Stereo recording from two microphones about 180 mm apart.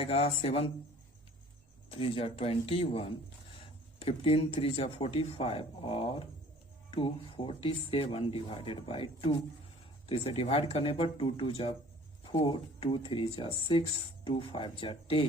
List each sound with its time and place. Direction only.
0.0 s speech: 30° left (ahead or behind)
1.9 s speech: 30° left (ahead or behind)